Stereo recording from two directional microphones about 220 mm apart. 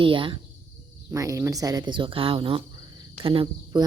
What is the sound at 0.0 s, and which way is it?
Speech, 25° right (ahead or behind).